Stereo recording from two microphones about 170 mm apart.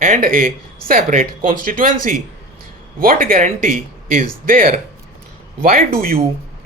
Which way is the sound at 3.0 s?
60° right (ahead or behind).